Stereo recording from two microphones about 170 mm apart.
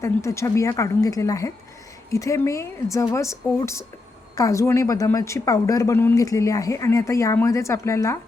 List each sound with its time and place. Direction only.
0.0 s a woman's voice: 15° left (ahead or behind)